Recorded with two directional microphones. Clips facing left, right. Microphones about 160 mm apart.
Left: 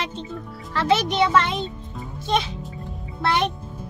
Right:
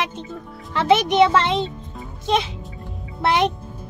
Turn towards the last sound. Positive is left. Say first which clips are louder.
# right 3 dB
turn(degrees=-20)  # may be behind; listen again after turning